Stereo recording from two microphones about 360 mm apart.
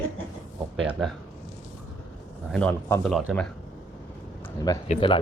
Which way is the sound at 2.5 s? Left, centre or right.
Centre.